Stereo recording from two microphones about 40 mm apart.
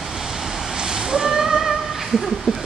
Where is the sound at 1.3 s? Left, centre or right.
Centre.